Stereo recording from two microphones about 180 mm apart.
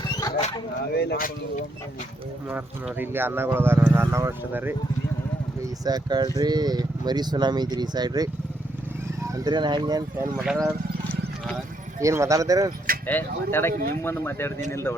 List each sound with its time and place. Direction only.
0.9 s speech: 65° left (ahead or behind)
2.5 s speech: 10° right (ahead or behind)
5.8 s speech: 20° right (ahead or behind)
10.4 s speech: centre (ahead or behind)
11.1 s a sound: centre (ahead or behind)
11.9 s speech: 15° right (ahead or behind)
13.1 s speech: 10° left (ahead or behind)